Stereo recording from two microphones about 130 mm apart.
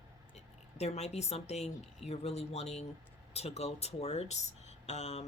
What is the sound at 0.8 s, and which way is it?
Speech, 55° left (ahead or behind).